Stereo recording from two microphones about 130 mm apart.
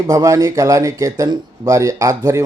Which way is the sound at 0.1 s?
25° right (ahead or behind).